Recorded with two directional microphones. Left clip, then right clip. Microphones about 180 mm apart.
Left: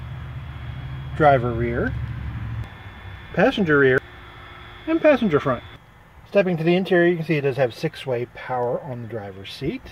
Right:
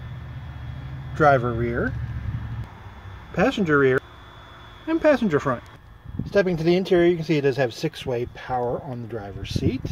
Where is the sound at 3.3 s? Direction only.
10° right (ahead or behind).